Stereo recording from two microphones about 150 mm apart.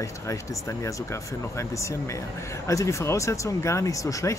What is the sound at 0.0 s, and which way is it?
Speech, 20° left (ahead or behind).